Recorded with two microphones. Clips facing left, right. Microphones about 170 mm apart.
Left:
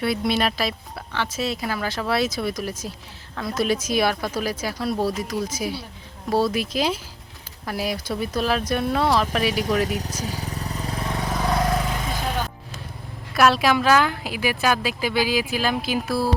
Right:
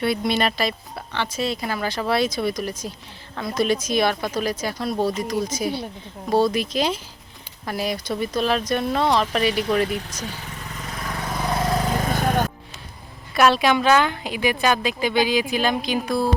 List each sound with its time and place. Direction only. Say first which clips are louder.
0.0 s speech: right 1 dB; centre (ahead or behind)
10.1 s vehicle: left 3 dB; 35° left (ahead or behind)
12.0 s music: right 5 dB; 50° right (ahead or behind)
13.3 s speech: right 1 dB; centre (ahead or behind)